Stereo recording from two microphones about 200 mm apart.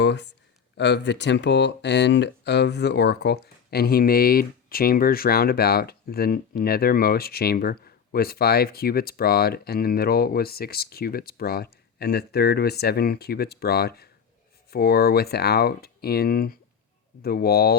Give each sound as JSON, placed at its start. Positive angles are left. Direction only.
{"t": 0.0, "sound": "speech", "side_deg": 60}